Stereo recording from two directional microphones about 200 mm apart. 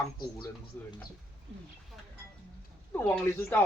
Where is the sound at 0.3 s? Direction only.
20° left (ahead or behind).